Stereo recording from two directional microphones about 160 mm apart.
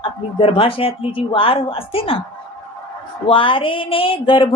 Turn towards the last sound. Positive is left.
turn(degrees=35)  # may be behind; listen again after turning